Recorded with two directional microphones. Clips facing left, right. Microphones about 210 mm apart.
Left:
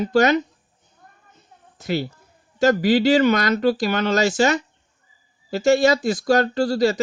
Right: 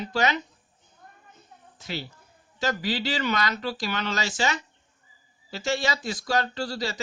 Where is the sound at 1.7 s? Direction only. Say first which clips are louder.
Left 11 dB; 50° left (ahead or behind).